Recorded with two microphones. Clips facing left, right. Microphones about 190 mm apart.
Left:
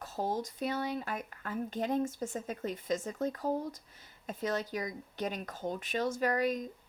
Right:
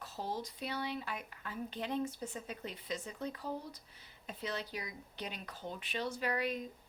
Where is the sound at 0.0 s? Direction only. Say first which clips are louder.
Left 6 dB; 45° left (ahead or behind).